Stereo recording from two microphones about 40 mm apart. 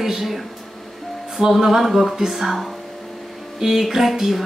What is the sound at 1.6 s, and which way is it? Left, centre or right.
Speech, centre.